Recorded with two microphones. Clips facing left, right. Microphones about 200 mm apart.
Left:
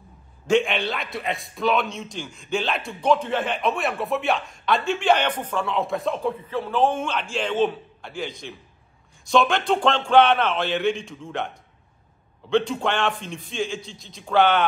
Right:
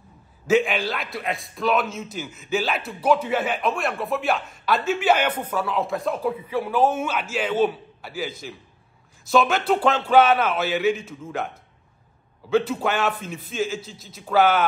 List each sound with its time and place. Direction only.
0.5 s a man's voice: 5° right (ahead or behind)